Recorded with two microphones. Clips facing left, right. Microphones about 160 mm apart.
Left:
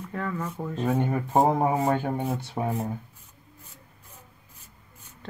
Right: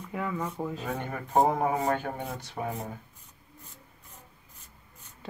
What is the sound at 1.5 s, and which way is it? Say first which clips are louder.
Speech: left 4 dB; 25° left (ahead or behind).